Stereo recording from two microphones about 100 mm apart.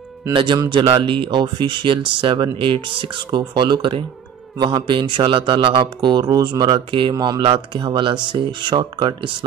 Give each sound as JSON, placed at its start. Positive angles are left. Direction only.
{"t": 0.3, "sound": "speech", "side_deg": -50}
{"t": 6.9, "sound": "speech", "side_deg": -55}